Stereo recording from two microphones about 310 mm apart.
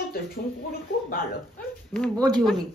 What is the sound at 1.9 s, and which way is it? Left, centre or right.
Speech, centre.